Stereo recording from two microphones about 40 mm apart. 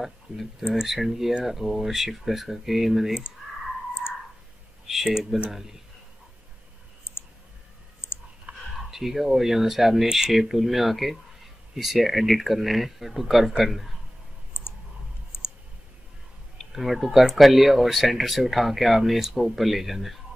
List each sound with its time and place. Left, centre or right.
0.0 s speech: centre
5.0 s speech: centre
8.5 s a sound: right
8.9 s speech: centre
16.5 s speech: centre